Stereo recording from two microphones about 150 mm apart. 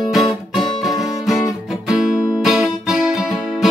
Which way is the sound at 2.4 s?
5° right (ahead or behind).